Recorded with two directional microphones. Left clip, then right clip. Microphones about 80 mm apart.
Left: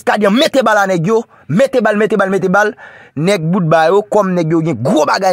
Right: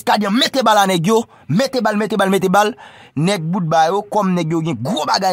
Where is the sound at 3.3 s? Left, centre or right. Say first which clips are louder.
Left 7 dB; left.